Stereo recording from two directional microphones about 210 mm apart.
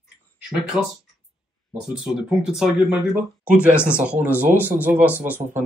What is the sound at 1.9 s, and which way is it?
A man's voice, 5° right (ahead or behind).